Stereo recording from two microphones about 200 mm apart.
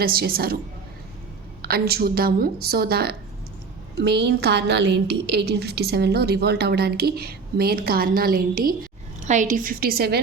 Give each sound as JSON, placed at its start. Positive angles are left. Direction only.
{"t": 0.0, "sound": "a woman's voice", "side_deg": -50}
{"t": 1.6, "sound": "a woman's voice", "side_deg": -50}